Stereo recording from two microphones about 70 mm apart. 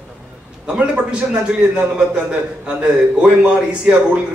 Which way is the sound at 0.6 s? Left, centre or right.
Centre.